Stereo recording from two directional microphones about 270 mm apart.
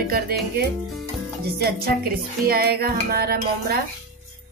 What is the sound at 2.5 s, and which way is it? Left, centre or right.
Speech, right.